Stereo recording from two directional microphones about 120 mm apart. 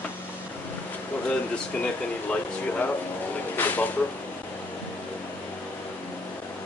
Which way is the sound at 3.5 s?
15° left (ahead or behind).